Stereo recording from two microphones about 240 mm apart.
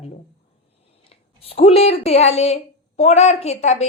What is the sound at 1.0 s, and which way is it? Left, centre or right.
Speech, left.